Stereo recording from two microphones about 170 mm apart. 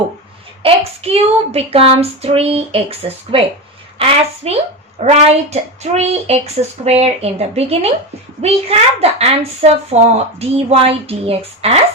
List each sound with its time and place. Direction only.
0.6 s a child's voice: 35° right (ahead or behind)